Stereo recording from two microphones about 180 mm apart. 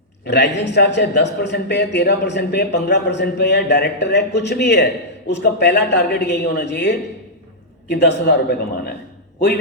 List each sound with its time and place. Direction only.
0.3 s a man's voice: 70° left (ahead or behind)